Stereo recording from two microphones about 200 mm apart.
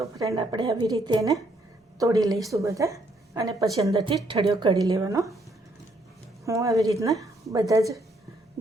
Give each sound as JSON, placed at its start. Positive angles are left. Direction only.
{"t": 0.0, "sound": "a woman's voice", "side_deg": -15}
{"t": 6.4, "sound": "a woman's voice", "side_deg": -15}